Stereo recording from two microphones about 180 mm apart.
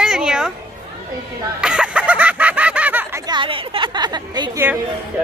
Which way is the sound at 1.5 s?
5° right (ahead or behind).